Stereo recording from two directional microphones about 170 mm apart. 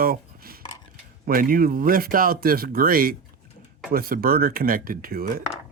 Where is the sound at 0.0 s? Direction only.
60° right (ahead or behind).